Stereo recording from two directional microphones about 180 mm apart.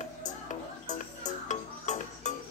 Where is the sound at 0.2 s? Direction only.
40° left (ahead or behind).